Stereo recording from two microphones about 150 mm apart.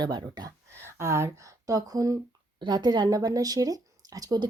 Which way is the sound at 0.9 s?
20° right (ahead or behind).